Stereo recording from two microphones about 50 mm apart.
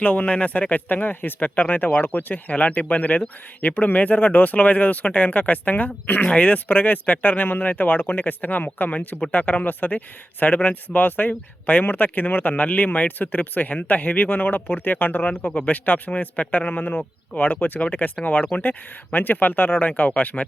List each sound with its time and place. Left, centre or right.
0.0 s speech: left